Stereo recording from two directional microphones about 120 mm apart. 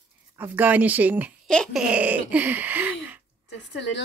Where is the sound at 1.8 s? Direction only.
10° right (ahead or behind).